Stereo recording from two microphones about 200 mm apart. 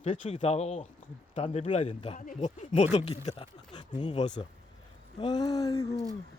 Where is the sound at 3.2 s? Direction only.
25° left (ahead or behind).